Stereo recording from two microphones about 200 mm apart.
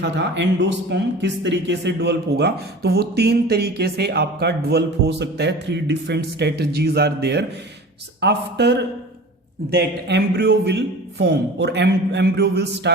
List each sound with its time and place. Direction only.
0.0 s speech: 60° right (ahead or behind)